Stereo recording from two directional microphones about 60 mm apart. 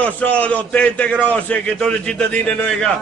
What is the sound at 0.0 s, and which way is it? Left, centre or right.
A man's voice, left.